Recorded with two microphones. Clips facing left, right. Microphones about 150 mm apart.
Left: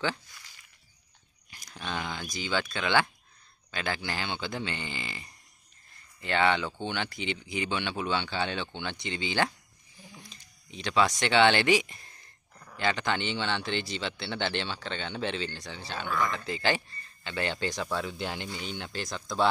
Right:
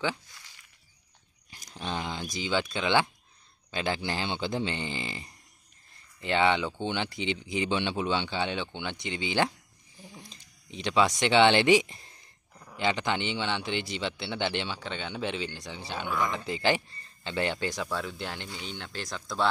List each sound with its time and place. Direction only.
1.5 s speech: 30° right (ahead or behind)
12.5 s speech: 15° right (ahead or behind)
17.9 s speech: centre (ahead or behind)